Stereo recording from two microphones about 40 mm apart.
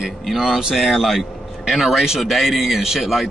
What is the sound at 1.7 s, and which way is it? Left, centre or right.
Speech, centre.